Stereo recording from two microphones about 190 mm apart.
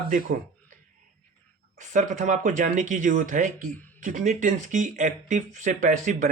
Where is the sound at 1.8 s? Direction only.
40° right (ahead or behind).